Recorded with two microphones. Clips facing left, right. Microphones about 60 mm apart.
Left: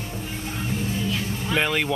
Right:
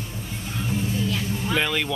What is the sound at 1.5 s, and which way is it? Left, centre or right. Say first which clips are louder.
Speech: left 2 dB; centre.